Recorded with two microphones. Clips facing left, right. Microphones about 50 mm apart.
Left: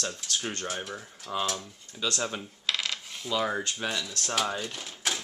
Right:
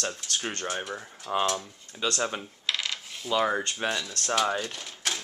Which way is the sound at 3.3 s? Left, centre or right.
Centre.